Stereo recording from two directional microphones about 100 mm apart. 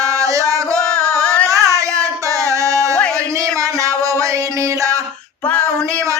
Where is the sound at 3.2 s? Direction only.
35° right (ahead or behind).